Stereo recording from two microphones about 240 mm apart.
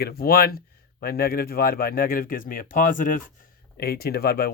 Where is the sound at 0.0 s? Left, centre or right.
Left.